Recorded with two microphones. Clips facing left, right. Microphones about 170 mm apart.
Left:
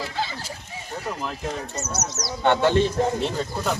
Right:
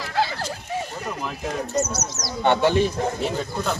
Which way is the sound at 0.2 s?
75° right (ahead or behind).